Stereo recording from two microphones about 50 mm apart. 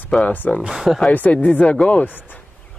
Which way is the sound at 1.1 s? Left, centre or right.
Left.